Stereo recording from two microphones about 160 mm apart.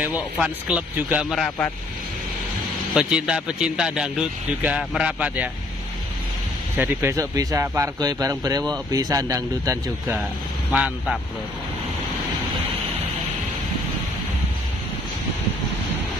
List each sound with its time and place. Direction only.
0.0 s a man's voice: 10° right (ahead or behind)
2.9 s a man's voice: 5° right (ahead or behind)
6.8 s speech: 15° right (ahead or behind)
10.7 s a man's voice: 5° right (ahead or behind)